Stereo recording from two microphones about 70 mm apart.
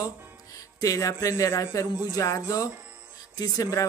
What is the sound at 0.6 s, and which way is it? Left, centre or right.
Speech, left.